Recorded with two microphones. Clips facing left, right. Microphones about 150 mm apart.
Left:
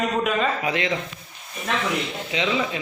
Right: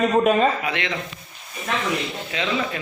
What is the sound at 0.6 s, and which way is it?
Speech, 35° left (ahead or behind).